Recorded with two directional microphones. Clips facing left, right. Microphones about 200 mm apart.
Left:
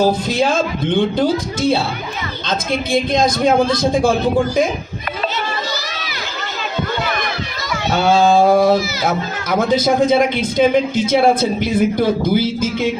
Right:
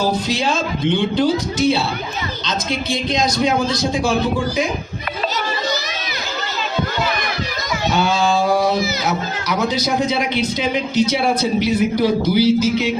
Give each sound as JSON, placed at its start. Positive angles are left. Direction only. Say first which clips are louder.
{"t": 0.3, "sound": "a man's voice", "louder": "left 3 dB", "side_deg": 50}
{"t": 7.9, "sound": "a sound", "louder": "left 6 dB", "side_deg": 50}
{"t": 9.0, "sound": "a man's voice", "louder": "left 2 dB", "side_deg": 50}